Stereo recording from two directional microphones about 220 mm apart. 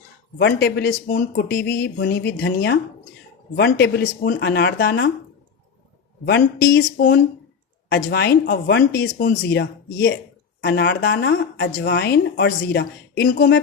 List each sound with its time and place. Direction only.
0.3 s speech: 50° left (ahead or behind)
6.2 s speech: 50° left (ahead or behind)
6.9 s speech: 35° left (ahead or behind)
7.9 s speech: 50° left (ahead or behind)